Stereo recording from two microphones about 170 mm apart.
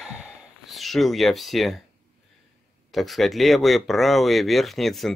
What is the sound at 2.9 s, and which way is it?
Speech, centre (ahead or behind).